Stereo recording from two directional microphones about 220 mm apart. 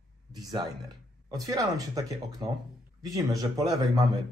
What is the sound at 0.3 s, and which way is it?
Speech, 20° right (ahead or behind).